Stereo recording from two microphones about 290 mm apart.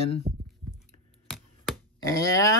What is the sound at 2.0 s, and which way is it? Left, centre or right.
Speech, centre.